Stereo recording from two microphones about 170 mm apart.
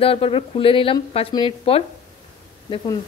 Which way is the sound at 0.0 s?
35° left (ahead or behind).